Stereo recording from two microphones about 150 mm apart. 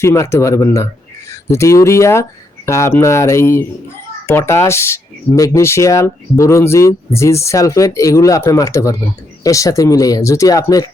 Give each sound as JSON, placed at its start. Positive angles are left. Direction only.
{"t": 0.0, "sound": "speech", "side_deg": 20}